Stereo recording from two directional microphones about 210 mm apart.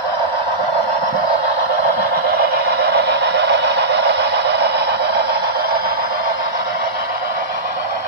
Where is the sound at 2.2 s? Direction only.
50° right (ahead or behind).